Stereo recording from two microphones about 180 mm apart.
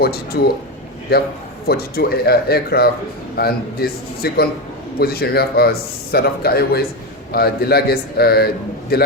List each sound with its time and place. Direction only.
0.0 s speech: 60° left (ahead or behind)